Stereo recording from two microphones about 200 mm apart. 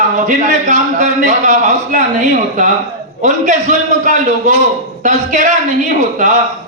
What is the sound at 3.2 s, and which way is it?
A man's voice, 40° right (ahead or behind).